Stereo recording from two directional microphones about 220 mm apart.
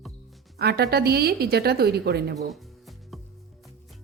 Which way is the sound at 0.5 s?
45° right (ahead or behind).